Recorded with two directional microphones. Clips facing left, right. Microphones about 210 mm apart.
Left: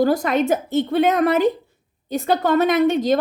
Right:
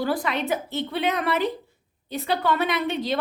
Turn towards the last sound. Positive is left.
turn(degrees=45)  # may be behind; listen again after turning